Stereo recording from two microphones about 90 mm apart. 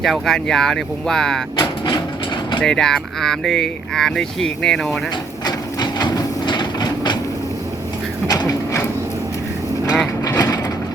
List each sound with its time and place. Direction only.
0.0 s speech: 5° left (ahead or behind)
1.5 s a sound: 55° left (ahead or behind)
2.6 s speech: 5° left (ahead or behind)
5.5 s train: 50° left (ahead or behind)
8.3 s printer: 45° left (ahead or behind)
10.2 s mechanisms: 40° left (ahead or behind)